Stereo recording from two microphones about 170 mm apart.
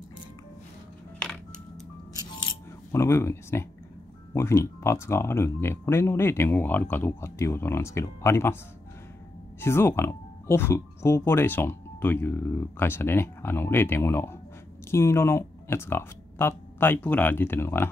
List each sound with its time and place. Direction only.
2.9 s speech: 15° left (ahead or behind)
9.6 s speech: 15° left (ahead or behind)